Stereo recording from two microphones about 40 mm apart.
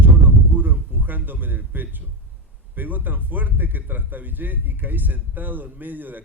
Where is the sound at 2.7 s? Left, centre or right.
Right.